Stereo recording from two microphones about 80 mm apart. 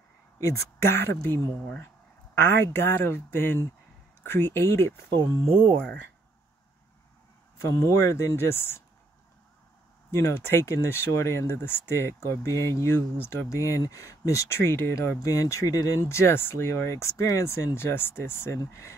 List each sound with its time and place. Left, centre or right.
0.4 s speech: left
2.6 s speech: left
7.6 s speech: left
10.1 s speech: left